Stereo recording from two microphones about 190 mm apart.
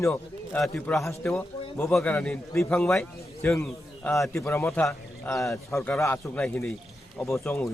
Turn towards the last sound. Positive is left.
turn(degrees=15)  # may be behind; listen again after turning